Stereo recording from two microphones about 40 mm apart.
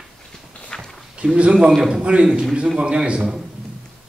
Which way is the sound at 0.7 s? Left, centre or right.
Centre.